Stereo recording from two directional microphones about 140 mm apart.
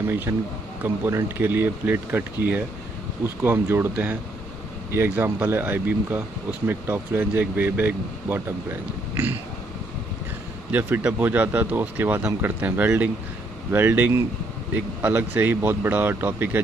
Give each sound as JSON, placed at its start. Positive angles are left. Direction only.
{"t": 0.0, "sound": "speech", "side_deg": -15}
{"t": 10.7, "sound": "speech", "side_deg": -10}